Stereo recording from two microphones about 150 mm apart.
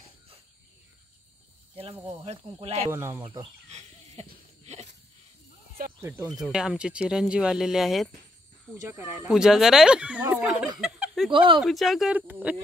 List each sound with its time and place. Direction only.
1.8 s speech: 40° right (ahead or behind)
2.9 s speech: 20° right (ahead or behind)
3.6 s a sound: 45° right (ahead or behind)
5.9 s speech: 20° right (ahead or behind)
6.4 s speech: 5° right (ahead or behind)
8.8 s speech: 15° right (ahead or behind)
11.3 s speech: 35° right (ahead or behind)
11.6 s speech: centre (ahead or behind)